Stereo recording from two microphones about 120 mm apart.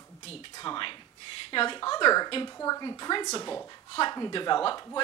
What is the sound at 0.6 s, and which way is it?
Speech, 40° left (ahead or behind).